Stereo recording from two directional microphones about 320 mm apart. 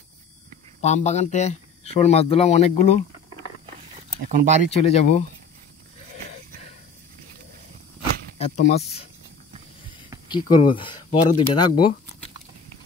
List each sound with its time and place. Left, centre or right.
0.8 s speech: left
4.1 s speech: right
4.7 s speech: centre
8.4 s speech: centre
10.3 s speech: centre